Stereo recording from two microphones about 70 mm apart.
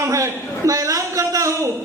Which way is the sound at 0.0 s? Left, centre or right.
Right.